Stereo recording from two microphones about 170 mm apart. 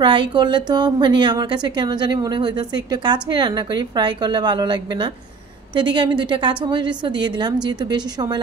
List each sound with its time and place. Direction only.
0.0 s a woman's voice: 30° right (ahead or behind)